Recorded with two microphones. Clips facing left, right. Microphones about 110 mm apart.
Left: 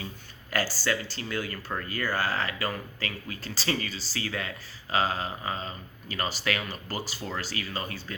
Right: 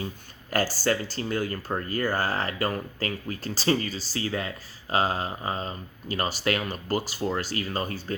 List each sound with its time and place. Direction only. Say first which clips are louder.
0.5 s speech: right 4 dB; 50° right (ahead or behind)
4.2 s speech: right 4 dB; 30° right (ahead or behind)